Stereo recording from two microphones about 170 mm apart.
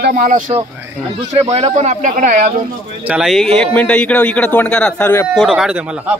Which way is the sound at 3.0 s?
5° right (ahead or behind).